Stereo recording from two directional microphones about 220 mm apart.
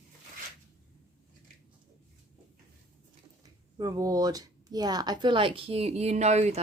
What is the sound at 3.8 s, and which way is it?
Speech, 15° right (ahead or behind).